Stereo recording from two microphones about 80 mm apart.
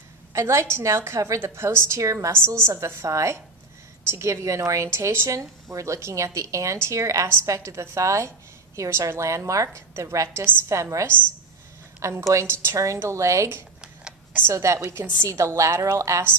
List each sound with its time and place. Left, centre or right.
0.3 s a woman's voice: right